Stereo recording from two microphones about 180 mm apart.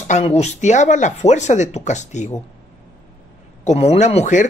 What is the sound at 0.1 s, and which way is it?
Speech, 35° left (ahead or behind).